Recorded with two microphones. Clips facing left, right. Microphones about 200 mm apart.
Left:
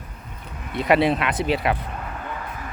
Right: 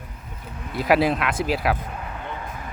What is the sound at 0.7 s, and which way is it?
Speech, centre (ahead or behind).